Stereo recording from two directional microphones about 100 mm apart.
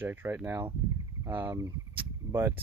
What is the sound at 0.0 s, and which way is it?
Speech, 20° right (ahead or behind).